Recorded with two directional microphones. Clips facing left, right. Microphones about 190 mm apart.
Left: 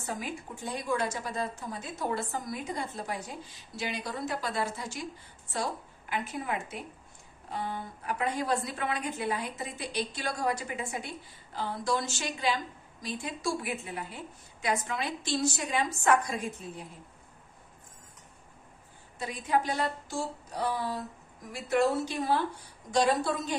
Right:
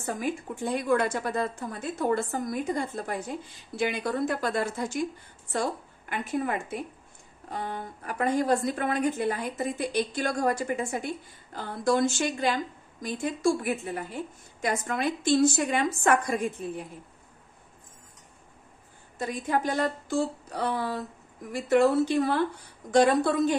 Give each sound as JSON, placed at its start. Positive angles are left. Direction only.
{"t": 0.0, "sound": "a woman's voice", "side_deg": -50}
{"t": 19.1, "sound": "a woman's voice", "side_deg": -50}